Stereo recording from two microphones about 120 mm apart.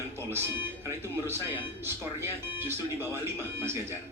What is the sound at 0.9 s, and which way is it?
Speech, 20° right (ahead or behind).